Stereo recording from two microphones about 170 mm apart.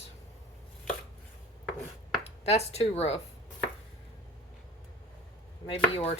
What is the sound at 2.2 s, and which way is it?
Speech, 40° left (ahead or behind).